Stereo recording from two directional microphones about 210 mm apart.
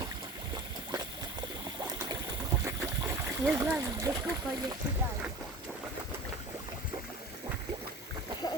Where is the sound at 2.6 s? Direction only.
10° right (ahead or behind).